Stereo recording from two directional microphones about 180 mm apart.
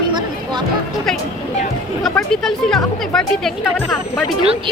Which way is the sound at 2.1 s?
5° left (ahead or behind).